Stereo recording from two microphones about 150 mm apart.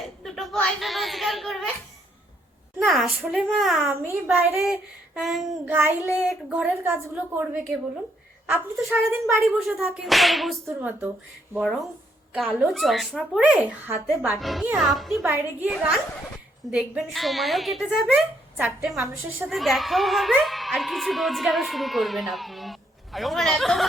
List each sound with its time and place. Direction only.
0.0 s a sound: centre (ahead or behind)
2.8 s speech: centre (ahead or behind)
4.0 s speech: 15° right (ahead or behind)
4.5 s speech: 5° right (ahead or behind)
5.6 s speech: 15° right (ahead or behind)
9.6 s speech: centre (ahead or behind)
10.7 s speech: 15° right (ahead or behind)
11.6 s speech: centre (ahead or behind); by 14.3 s 15° right (ahead or behind)
14.3 s speech: centre (ahead or behind)